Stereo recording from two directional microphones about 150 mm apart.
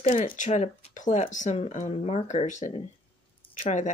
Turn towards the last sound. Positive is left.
turn(degrees=55)  # may be behind; listen again after turning